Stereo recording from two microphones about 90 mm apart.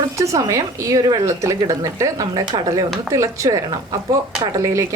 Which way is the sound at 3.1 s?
35° right (ahead or behind).